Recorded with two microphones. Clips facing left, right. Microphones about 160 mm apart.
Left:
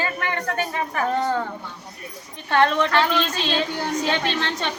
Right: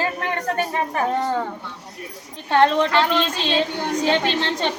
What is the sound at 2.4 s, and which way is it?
Speech, 20° right (ahead or behind).